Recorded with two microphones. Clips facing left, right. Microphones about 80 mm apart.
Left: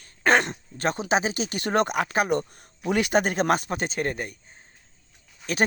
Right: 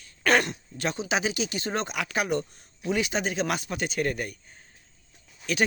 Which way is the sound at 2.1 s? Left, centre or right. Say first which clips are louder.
Left 4 dB; left.